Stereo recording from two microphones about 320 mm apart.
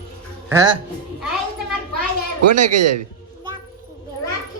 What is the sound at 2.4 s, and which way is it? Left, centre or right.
Speech, right.